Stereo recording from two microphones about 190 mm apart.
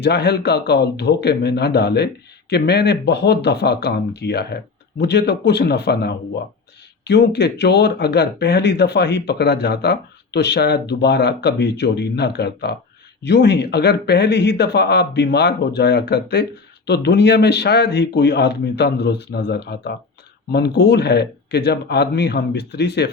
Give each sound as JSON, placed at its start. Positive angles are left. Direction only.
{"t": 0.0, "sound": "speech", "side_deg": 60}